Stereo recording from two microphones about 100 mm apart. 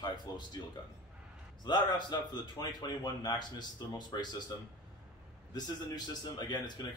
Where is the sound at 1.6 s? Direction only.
45° left (ahead or behind).